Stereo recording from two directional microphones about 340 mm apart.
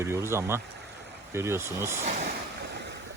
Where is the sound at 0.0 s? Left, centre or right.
Centre.